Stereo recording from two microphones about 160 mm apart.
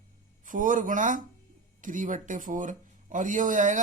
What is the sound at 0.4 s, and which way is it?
Speech, 55° right (ahead or behind).